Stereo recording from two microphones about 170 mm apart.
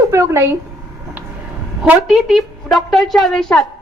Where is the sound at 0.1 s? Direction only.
15° right (ahead or behind).